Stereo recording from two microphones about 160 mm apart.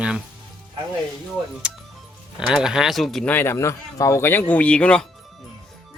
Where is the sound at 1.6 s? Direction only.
5° right (ahead or behind).